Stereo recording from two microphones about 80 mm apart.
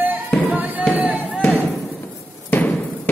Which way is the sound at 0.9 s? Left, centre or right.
Centre.